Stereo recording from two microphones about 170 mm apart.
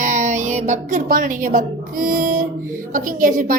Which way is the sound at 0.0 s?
45° right (ahead or behind).